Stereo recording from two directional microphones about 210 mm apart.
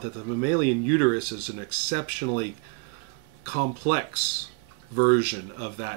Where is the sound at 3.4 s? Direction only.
45° right (ahead or behind).